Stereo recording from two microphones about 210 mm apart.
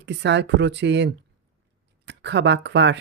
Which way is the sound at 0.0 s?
55° right (ahead or behind).